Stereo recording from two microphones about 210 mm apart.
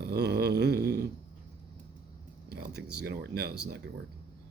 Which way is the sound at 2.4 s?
50° right (ahead or behind).